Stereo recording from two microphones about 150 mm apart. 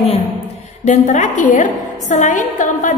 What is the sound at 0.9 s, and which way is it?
A woman's voice, 55° left (ahead or behind).